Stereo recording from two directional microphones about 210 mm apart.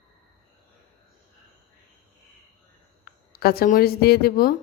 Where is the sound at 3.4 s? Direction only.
45° left (ahead or behind).